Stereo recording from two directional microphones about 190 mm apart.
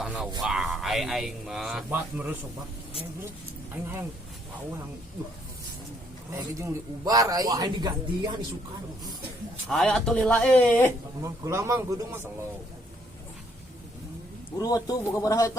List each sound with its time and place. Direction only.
0.0 s a sound: 5° right (ahead or behind)
0.4 s speech: centre (ahead or behind)
6.3 s a man's voice: 15° right (ahead or behind)
9.6 s speech: centre (ahead or behind)
11.2 s a man's voice: 15° right (ahead or behind)
14.6 s a man's voice: 20° left (ahead or behind)